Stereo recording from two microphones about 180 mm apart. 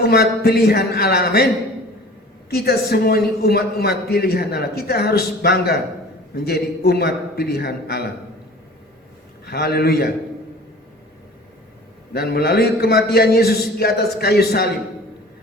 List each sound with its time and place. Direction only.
0.0 s a man's voice: 60° left (ahead or behind)
2.5 s a man's voice: 60° left (ahead or behind)
9.5 s a man's voice: 60° left (ahead or behind)
12.1 s a man's voice: 60° left (ahead or behind)